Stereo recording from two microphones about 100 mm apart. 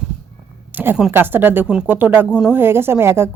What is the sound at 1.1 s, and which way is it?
Speech, 20° right (ahead or behind).